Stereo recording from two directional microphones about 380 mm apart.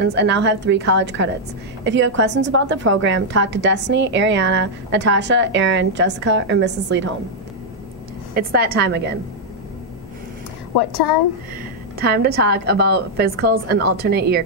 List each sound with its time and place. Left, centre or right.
0.0 s a woman's voice: right
8.4 s a woman's voice: right
10.7 s a woman's voice: left
12.0 s a woman's voice: right